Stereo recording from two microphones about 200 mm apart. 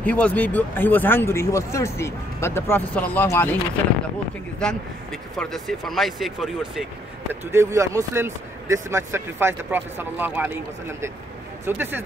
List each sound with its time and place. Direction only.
0.0 s speech: 5° left (ahead or behind)
4.6 s speech: 5° left (ahead or behind)
7.5 s speech: 15° right (ahead or behind)